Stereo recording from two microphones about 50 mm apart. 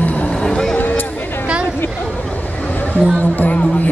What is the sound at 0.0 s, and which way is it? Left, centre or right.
Music, left.